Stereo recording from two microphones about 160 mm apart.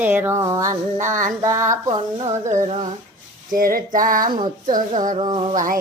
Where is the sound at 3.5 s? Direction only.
60° right (ahead or behind).